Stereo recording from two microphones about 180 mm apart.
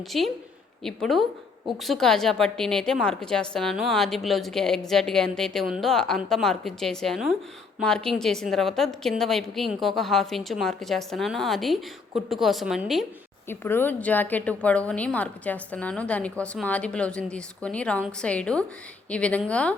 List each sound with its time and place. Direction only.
0.1 s a woman's voice: centre (ahead or behind)
13.5 s a woman's voice: 10° left (ahead or behind)